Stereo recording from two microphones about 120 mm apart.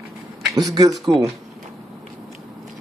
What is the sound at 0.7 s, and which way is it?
Speech, 35° right (ahead or behind).